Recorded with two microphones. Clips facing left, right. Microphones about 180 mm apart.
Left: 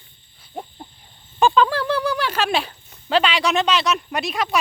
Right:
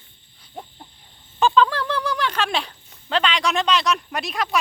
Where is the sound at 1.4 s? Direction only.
15° left (ahead or behind).